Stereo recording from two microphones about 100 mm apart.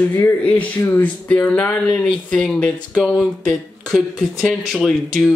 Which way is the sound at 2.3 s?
5° left (ahead or behind).